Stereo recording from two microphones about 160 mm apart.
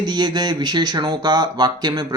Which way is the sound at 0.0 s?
25° right (ahead or behind).